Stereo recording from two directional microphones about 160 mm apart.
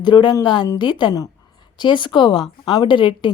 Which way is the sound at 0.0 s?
30° left (ahead or behind).